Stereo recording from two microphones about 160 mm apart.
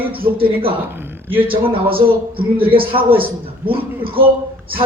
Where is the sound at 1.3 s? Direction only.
35° right (ahead or behind).